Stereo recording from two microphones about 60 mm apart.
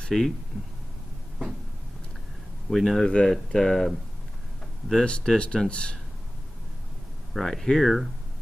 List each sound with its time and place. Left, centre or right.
0.0 s speech: centre
2.7 s speech: centre
3.1 s speech: centre
4.9 s speech: centre
7.3 s speech: centre